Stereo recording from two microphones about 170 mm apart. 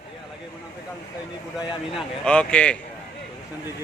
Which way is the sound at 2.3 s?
5° left (ahead or behind).